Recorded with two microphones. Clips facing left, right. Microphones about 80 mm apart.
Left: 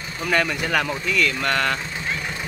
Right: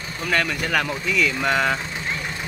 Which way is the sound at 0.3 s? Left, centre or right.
Centre.